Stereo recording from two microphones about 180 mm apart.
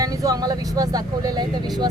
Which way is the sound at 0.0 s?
20° right (ahead or behind).